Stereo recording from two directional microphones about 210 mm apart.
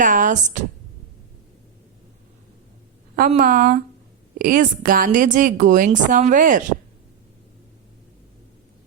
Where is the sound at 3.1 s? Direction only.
45° right (ahead or behind).